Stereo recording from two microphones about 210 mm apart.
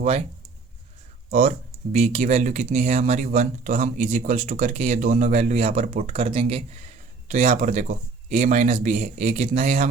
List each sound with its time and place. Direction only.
0.0 s speech: 30° right (ahead or behind)
1.3 s speech: 35° right (ahead or behind)